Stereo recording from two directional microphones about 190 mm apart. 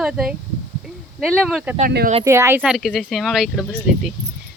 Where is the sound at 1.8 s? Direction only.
55° right (ahead or behind).